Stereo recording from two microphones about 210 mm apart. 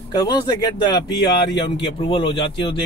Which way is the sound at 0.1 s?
20° left (ahead or behind).